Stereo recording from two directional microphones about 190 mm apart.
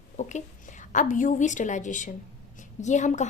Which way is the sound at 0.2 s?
40° left (ahead or behind).